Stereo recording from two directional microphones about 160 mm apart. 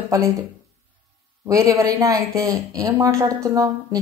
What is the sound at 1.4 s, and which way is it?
Speech, 20° right (ahead or behind).